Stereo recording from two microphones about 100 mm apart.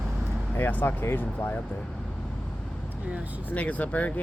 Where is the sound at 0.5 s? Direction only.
20° left (ahead or behind).